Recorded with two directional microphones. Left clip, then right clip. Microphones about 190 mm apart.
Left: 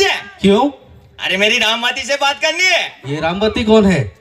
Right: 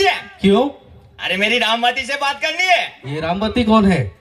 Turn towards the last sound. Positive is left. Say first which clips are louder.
# left 3 dB
turn(degrees=35)  # may be behind; listen again after turning